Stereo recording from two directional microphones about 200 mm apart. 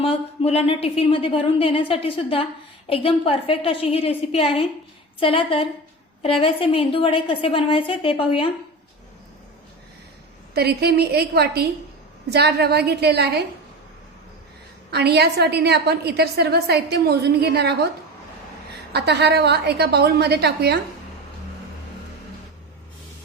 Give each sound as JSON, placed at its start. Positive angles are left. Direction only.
{"t": 0.0, "sound": "a woman's voice", "side_deg": 30}
{"t": 10.5, "sound": "a woman's voice", "side_deg": -55}
{"t": 14.8, "sound": "a woman's voice", "side_deg": -55}
{"t": 18.9, "sound": "a woman's voice", "side_deg": -55}